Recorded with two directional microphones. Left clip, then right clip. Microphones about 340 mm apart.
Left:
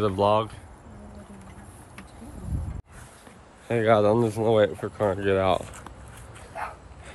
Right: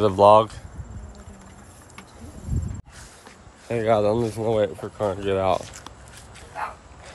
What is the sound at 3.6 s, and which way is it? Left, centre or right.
Speech, centre.